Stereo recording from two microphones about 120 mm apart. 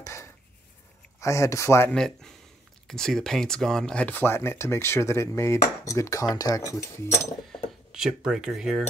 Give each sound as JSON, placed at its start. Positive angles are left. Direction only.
{"t": 0.0, "sound": "dishes", "side_deg": 25}
{"t": 1.2, "sound": "speech", "side_deg": 25}
{"t": 1.9, "sound": "speech", "side_deg": 5}
{"t": 7.5, "sound": "speech", "side_deg": -5}